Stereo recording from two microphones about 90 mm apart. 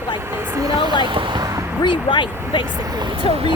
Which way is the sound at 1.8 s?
60° left (ahead or behind).